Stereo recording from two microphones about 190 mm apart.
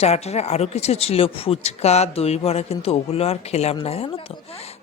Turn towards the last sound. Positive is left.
turn(degrees=30)  # may be behind; listen again after turning